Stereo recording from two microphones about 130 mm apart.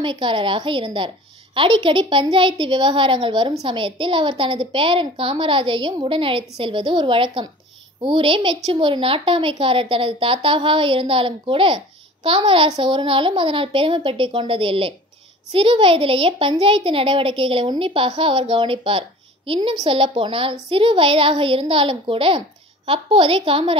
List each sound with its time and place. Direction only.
0.0 s a woman's voice: 40° right (ahead or behind)